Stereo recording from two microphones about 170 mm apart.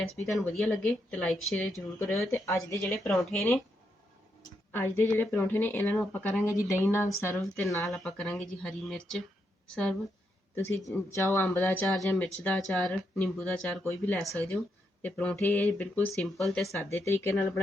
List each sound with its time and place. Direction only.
0.3 s speech: centre (ahead or behind)
2.0 s speech: 15° left (ahead or behind)
2.8 s speech: centre (ahead or behind)
4.7 s speech: 10° left (ahead or behind)
7.9 s a woman's voice: centre (ahead or behind)
10.5 s speech: 15° left (ahead or behind)
16.7 s speech: 15° left (ahead or behind)